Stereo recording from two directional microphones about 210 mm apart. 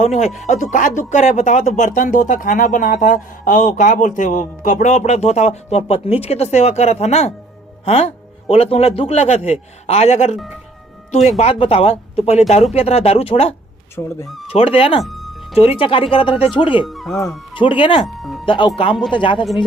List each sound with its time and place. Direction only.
0.0 s speech: 30° left (ahead or behind)
11.3 s speech: 30° left (ahead or behind)
15.0 s music: centre (ahead or behind)
15.8 s speech: 25° left (ahead or behind)
16.8 s speech: centre (ahead or behind)
17.2 s speech: 20° left (ahead or behind)
18.2 s music: centre (ahead or behind)
18.4 s speech: 25° left (ahead or behind)